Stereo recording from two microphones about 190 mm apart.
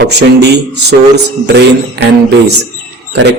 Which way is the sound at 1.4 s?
65° right (ahead or behind).